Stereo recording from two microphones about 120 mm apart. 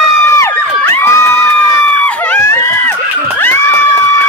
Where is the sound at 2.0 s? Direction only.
10° left (ahead or behind).